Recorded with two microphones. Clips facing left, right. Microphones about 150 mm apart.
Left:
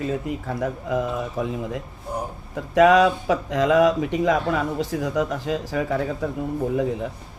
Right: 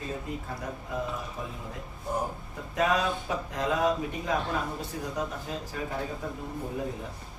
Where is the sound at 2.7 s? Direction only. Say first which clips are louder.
Left 12 dB; 90° left.